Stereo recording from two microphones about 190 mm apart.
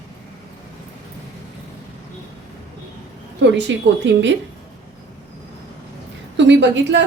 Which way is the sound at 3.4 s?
70° right (ahead or behind).